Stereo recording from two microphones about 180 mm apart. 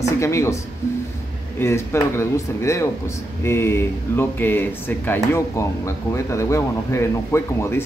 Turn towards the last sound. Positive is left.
turn(degrees=15)  # may be behind; listen again after turning